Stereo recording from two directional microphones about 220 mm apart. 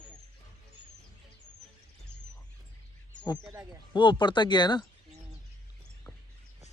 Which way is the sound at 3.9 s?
20° left (ahead or behind).